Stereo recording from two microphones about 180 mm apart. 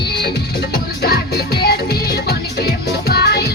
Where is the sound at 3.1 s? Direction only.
65° left (ahead or behind).